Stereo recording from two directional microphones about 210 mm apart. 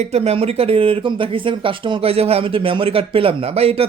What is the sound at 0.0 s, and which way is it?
A man's voice, 30° right (ahead or behind).